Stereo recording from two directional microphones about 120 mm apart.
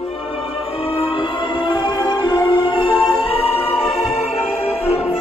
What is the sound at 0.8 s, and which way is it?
Music, 50° left (ahead or behind).